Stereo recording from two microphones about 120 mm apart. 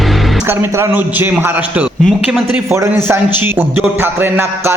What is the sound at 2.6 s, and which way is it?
A man's voice, 25° right (ahead or behind).